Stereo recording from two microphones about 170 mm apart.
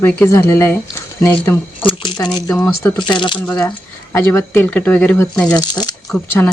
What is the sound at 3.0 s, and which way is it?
Speech, 25° left (ahead or behind).